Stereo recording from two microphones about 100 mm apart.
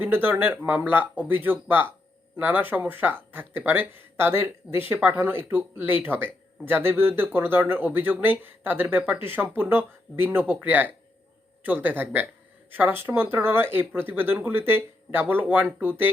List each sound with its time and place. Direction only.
0.0 s speech: 20° right (ahead or behind)